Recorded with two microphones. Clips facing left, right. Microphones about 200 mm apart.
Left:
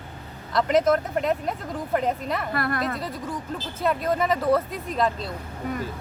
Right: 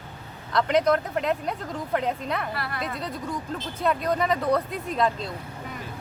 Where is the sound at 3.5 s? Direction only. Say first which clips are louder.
Left 1 dB; centre (ahead or behind).